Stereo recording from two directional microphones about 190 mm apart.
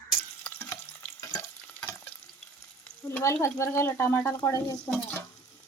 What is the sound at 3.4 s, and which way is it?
Speech, 15° left (ahead or behind).